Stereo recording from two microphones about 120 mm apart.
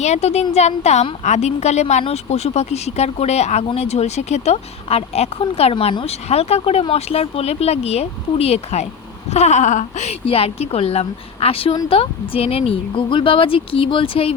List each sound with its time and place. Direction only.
0.0 s a woman's voice: 65° left (ahead or behind)
9.3 s speech: 75° left (ahead or behind); by 14.3 s 50° left (ahead or behind)